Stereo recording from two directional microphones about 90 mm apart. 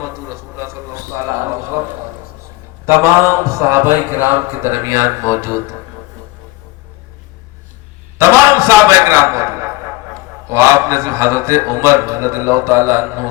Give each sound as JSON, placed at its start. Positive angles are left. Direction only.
{"t": 0.0, "sound": "a sound", "side_deg": -35}
{"t": 2.8, "sound": "a man's voice", "side_deg": -30}
{"t": 8.2, "sound": "a man's voice", "side_deg": -30}